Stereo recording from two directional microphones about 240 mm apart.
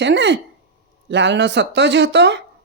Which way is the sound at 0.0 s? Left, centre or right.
Right.